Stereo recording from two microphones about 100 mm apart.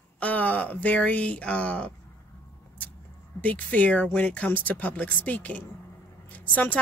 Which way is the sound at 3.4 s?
15° left (ahead or behind).